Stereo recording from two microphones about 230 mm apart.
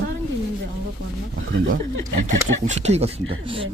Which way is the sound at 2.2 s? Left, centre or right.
Right.